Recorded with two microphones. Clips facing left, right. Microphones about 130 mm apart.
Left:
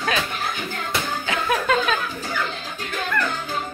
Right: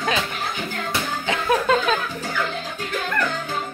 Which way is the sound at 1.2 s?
30° right (ahead or behind).